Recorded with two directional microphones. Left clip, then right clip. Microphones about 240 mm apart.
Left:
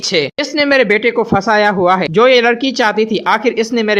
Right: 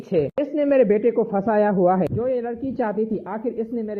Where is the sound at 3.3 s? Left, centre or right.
Left.